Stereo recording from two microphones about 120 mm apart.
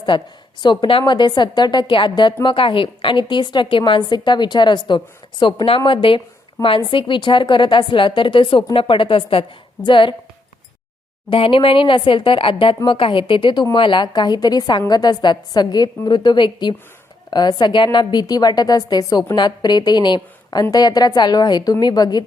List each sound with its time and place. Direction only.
0.1 s a woman's voice: 40° left (ahead or behind)
11.3 s a woman's voice: 45° left (ahead or behind)